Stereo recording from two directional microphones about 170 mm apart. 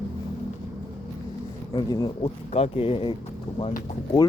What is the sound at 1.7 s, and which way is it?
Speech, 25° left (ahead or behind).